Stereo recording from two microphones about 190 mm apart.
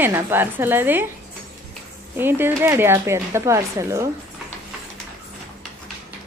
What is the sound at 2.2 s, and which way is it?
Speech, 10° right (ahead or behind).